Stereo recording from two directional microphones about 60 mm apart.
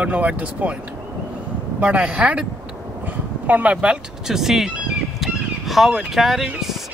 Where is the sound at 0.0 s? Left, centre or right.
Right.